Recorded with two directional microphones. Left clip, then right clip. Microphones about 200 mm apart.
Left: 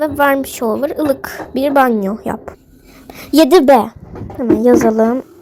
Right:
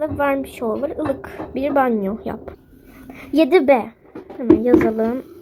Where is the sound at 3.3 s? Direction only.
35° left (ahead or behind); by 5.3 s 15° left (ahead or behind).